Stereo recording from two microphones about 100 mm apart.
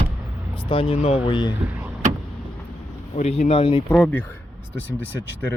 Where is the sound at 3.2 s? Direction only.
90° left; by 3.8 s 70° left (ahead or behind).